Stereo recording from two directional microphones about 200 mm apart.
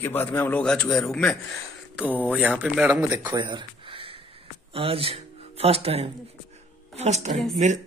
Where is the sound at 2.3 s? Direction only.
5° right (ahead or behind).